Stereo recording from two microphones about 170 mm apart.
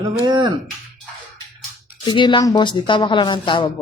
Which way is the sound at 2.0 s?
25° left (ahead or behind).